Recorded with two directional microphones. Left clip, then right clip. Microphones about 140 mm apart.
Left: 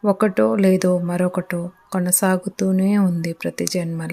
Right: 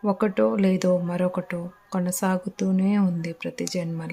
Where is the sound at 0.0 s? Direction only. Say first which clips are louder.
Left 5 dB; 25° left (ahead or behind).